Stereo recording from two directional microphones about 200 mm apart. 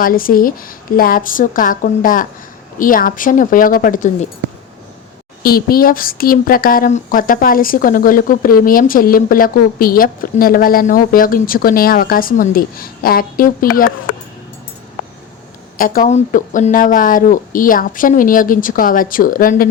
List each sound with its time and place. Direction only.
0.0 s speech: 45° left (ahead or behind)
5.4 s speech: 50° left (ahead or behind)
15.8 s speech: 45° left (ahead or behind)